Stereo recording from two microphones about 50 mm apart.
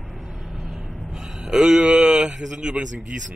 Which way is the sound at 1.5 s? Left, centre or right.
Centre.